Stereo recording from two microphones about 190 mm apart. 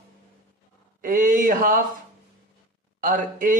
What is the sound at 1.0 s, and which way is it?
Speech, 45° right (ahead or behind).